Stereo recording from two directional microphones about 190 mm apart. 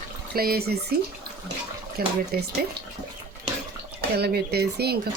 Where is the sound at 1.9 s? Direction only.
55° right (ahead or behind).